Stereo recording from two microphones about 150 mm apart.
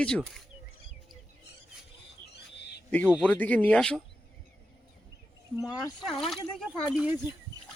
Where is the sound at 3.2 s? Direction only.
10° left (ahead or behind).